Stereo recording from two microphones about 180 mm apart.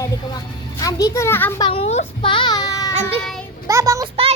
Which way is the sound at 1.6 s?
30° left (ahead or behind).